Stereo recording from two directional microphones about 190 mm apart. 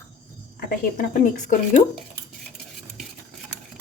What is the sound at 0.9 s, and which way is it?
Speech, 45° left (ahead or behind).